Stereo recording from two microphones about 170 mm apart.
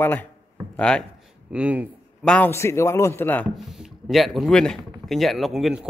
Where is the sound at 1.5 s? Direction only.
10° right (ahead or behind).